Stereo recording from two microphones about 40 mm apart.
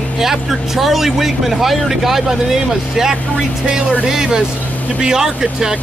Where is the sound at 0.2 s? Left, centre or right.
Centre.